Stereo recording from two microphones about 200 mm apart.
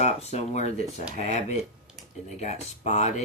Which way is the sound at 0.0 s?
35° left (ahead or behind).